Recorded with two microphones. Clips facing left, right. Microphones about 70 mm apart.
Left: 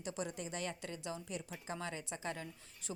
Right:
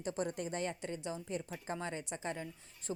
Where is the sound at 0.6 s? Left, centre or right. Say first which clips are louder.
Right 4 dB; right.